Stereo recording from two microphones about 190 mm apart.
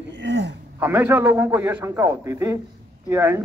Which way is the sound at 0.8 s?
10° right (ahead or behind).